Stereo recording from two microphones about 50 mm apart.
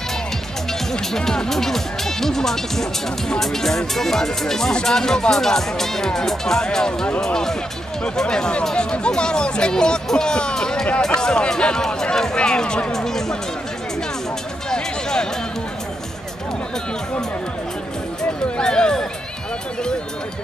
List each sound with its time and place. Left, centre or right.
0.9 s speech: centre
14.7 s music: centre
18.6 s speech: centre